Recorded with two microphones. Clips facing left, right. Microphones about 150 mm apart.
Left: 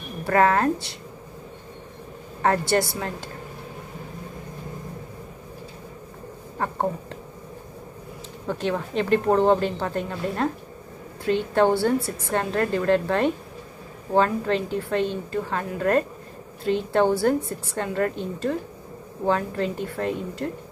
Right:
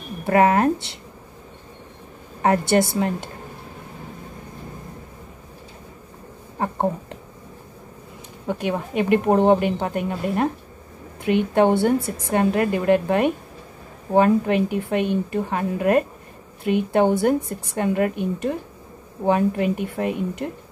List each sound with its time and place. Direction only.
0.2 s a woman's voice: 20° right (ahead or behind)
2.4 s a woman's voice: 20° right (ahead or behind)
6.6 s a woman's voice: 20° right (ahead or behind)
8.5 s a woman's voice: 15° right (ahead or behind)